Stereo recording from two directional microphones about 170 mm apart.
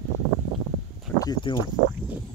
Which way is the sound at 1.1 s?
20° left (ahead or behind).